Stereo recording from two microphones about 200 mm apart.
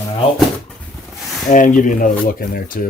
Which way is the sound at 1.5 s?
40° left (ahead or behind).